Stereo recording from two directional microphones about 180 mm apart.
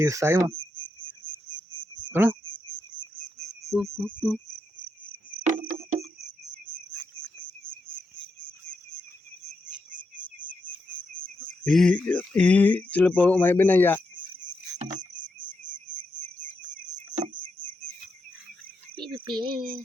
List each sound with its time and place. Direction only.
0.0 s speech: 15° right (ahead or behind)
0.8 s cricket: 25° right (ahead or behind)
2.1 s speech: 10° right (ahead or behind)
3.9 s speech: centre (ahead or behind)
5.4 s cricket: 45° right (ahead or behind)
10.6 s cricket: 50° right (ahead or behind)
11.6 s speech: 5° left (ahead or behind)
17.2 s a sound: 40° right (ahead or behind)
18.9 s a sound: 25° right (ahead or behind)
19.4 s speech: 55° right (ahead or behind)